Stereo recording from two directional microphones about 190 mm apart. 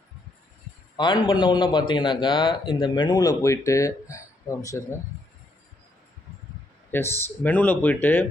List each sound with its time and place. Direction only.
0.9 s a man's voice: 25° left (ahead or behind)
6.9 s speech: 15° left (ahead or behind)